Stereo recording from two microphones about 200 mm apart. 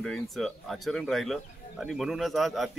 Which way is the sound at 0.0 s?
Centre (ahead or behind).